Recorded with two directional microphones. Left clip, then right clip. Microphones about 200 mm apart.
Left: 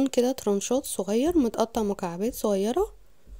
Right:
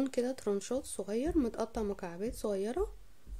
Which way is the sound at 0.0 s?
40° left (ahead or behind).